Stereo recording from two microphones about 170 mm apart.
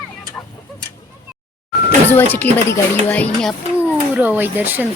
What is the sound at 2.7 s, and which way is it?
Speech, 10° left (ahead or behind).